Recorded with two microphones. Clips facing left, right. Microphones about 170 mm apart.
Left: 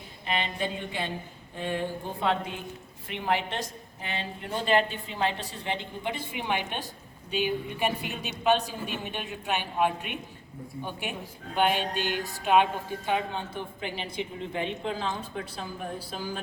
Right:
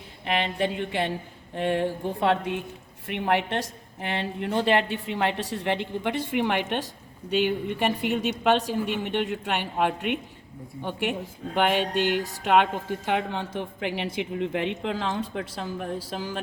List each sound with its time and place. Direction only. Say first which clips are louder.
0.3 s a woman's voice: right 5 dB; 70° right (ahead or behind)
11.5 s a woman's voice: right 3 dB; 75° right (ahead or behind)